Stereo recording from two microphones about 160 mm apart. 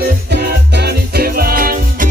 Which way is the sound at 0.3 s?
90° right.